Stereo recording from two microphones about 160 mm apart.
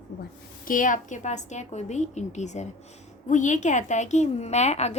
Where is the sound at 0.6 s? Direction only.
55° left (ahead or behind).